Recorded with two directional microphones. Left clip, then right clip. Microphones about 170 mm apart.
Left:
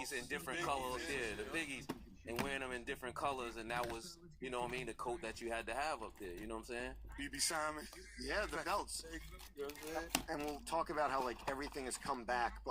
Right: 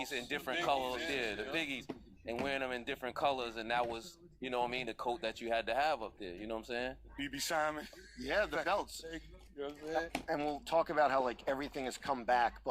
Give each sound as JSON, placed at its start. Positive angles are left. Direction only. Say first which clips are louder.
{"t": 0.0, "sound": "speech", "louder": "right 4 dB", "side_deg": -25}
{"t": 7.3, "sound": "speech", "louder": "right 5 dB", "side_deg": -25}
{"t": 8.2, "sound": "speech", "louder": "right 6 dB", "side_deg": -45}
{"t": 8.5, "sound": "speech", "louder": "right 5 dB", "side_deg": -30}
{"t": 8.8, "sound": "speech", "louder": "right 4 dB", "side_deg": -45}
{"t": 9.9, "sound": "speech", "louder": "right 5 dB", "side_deg": -25}
{"t": 10.3, "sound": "speech", "louder": "right 6 dB", "side_deg": -45}
{"t": 11.1, "sound": "speech", "louder": "right 6 dB", "side_deg": -30}